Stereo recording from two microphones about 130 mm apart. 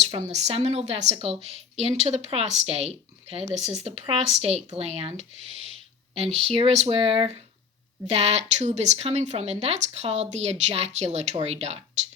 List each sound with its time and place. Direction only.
0.0 s speech: 60° right (ahead or behind)